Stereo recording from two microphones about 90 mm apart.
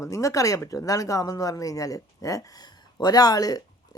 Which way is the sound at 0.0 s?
35° left (ahead or behind).